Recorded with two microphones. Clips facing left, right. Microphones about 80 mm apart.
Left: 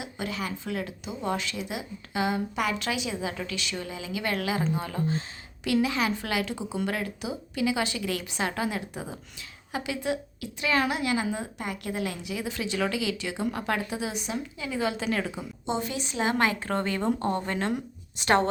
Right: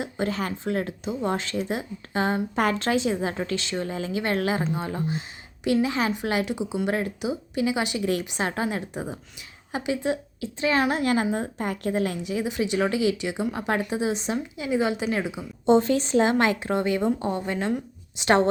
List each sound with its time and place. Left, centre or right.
0.0 s a woman's voice: right; by 6.9 s centre
6.9 s a woman's voice: right
12.2 s speech: right
15.6 s a woman's voice: right
16.7 s a woman's voice: centre
18.2 s speech: right